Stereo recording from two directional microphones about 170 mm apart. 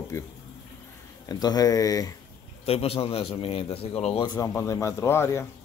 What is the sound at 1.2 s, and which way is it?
Speech, 20° left (ahead or behind).